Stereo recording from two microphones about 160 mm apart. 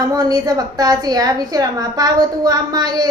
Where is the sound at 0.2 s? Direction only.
25° right (ahead or behind).